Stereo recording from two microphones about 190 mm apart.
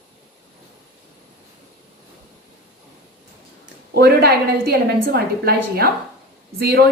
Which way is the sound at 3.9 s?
55° right (ahead or behind).